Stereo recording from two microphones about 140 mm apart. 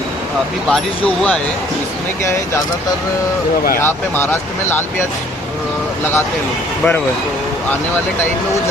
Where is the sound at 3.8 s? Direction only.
15° left (ahead or behind).